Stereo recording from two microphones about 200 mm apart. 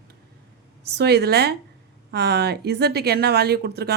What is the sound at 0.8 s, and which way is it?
Speech, 55° right (ahead or behind).